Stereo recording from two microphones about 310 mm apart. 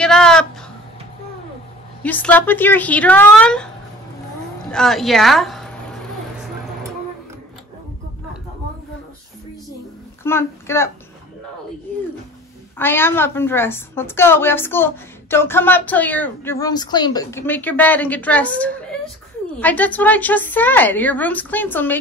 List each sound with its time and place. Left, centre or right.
0.0 s a sound: centre
2.0 s a woman's voice: centre
4.6 s speech: centre
10.2 s speech: centre
12.7 s a woman's voice: centre